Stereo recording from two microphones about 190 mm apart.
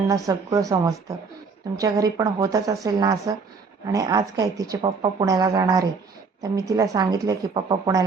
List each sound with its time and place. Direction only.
0.1 s speech: 15° right (ahead or behind)